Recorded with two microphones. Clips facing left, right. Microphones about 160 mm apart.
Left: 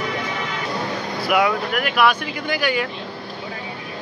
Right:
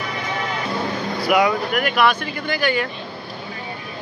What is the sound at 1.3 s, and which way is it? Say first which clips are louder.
Speech: right 1 dB; centre (ahead or behind).